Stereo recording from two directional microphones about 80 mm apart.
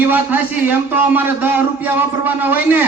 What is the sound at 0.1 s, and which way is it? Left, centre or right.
A man's voice, right.